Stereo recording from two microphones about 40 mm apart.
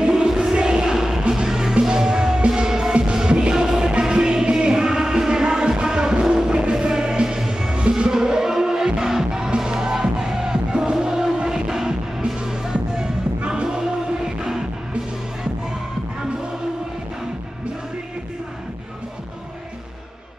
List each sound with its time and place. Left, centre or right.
0.0 s music: centre
0.3 s a sound: centre
1.3 s music: centre